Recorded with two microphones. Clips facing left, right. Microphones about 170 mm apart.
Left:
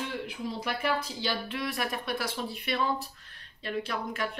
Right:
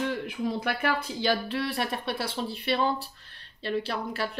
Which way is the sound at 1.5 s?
30° right (ahead or behind).